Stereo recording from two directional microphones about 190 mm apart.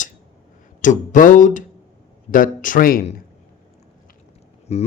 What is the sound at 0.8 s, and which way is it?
Speech, 45° left (ahead or behind).